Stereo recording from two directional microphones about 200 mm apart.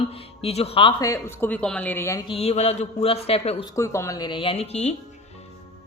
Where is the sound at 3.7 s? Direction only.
15° left (ahead or behind); by 4.9 s 30° left (ahead or behind).